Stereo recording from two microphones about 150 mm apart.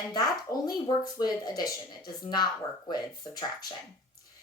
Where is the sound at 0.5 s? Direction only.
20° left (ahead or behind).